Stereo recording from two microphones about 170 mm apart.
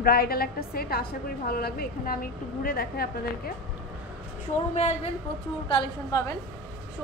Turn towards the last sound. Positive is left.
turn(degrees=20)  # may be behind; listen again after turning